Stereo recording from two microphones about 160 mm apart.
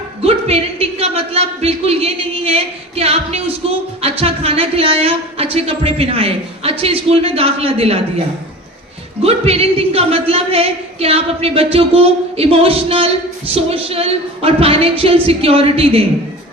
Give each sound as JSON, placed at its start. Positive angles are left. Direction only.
{"t": 0.2, "sound": "a woman's voice", "side_deg": -40}
{"t": 9.2, "sound": "a woman's voice", "side_deg": -40}